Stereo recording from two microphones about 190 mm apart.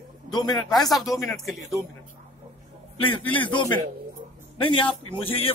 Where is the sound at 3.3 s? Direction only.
25° left (ahead or behind).